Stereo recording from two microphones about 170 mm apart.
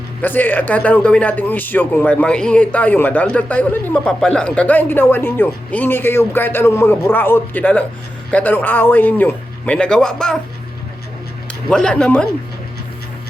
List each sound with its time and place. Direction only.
0.2 s a man's voice: 10° left (ahead or behind)
11.7 s a man's voice: 5° left (ahead or behind)